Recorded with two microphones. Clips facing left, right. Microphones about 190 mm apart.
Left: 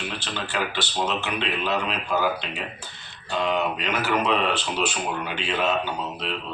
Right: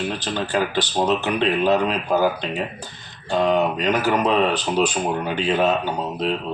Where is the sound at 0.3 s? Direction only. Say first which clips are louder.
Right 6 dB; 40° right (ahead or behind).